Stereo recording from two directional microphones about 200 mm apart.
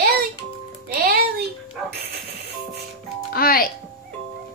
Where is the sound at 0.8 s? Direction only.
50° right (ahead or behind).